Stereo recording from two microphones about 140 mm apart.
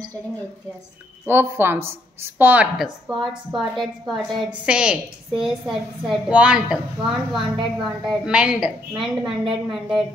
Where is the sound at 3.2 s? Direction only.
Centre (ahead or behind).